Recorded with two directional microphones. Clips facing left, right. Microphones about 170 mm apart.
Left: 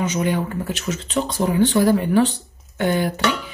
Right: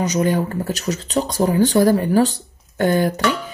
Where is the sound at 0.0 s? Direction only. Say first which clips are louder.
Right 3 dB; 40° right (ahead or behind).